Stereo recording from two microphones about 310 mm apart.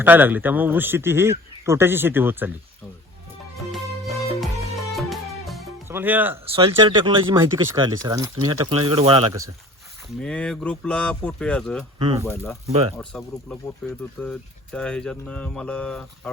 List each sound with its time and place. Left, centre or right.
0.0 s a man's voice: centre
3.7 s music: centre
6.4 s a man's voice: centre
10.2 s speech: centre
11.9 s a man's voice: centre
12.3 s speech: centre
12.6 s speech: centre
13.0 s speech: centre